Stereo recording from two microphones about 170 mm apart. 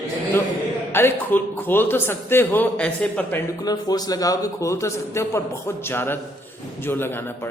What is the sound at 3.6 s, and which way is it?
A man's voice, 25° left (ahead or behind).